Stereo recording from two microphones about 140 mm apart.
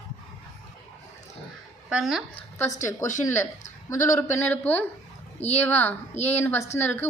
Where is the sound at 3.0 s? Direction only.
25° left (ahead or behind).